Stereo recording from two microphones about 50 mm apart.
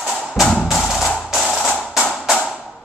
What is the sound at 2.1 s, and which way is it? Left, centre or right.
Music, centre.